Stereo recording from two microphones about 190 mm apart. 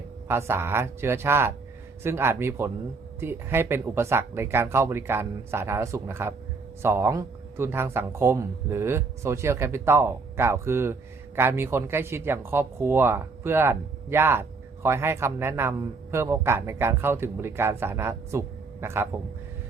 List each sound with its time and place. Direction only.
0.3 s speech: 15° right (ahead or behind)